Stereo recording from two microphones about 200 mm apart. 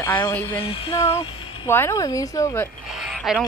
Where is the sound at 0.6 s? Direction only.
25° left (ahead or behind).